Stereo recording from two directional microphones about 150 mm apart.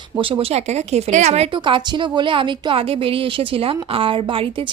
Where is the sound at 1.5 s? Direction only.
30° right (ahead or behind).